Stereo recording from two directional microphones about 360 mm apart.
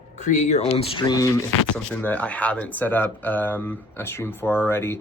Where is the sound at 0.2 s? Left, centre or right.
Left.